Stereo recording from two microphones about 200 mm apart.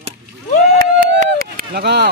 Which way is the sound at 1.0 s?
45° right (ahead or behind).